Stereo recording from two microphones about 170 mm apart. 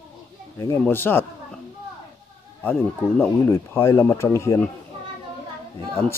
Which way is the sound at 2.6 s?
10° left (ahead or behind).